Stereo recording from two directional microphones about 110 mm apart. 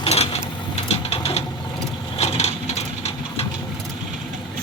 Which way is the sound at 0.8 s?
65° left (ahead or behind).